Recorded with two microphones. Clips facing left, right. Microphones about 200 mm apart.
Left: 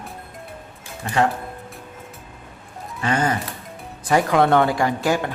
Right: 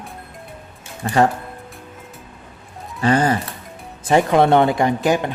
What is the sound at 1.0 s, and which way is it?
Speech, 35° right (ahead or behind).